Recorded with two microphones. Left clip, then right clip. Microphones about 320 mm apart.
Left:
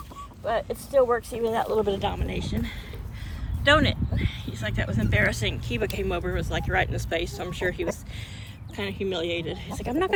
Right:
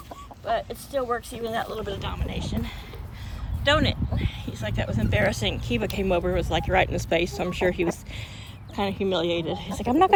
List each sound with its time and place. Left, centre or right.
0.4 s speech: centre